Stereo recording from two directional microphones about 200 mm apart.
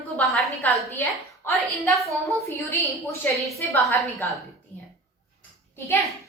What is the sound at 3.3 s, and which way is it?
Speech, 15° right (ahead or behind).